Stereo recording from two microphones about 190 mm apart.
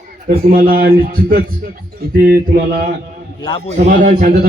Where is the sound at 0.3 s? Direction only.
30° right (ahead or behind).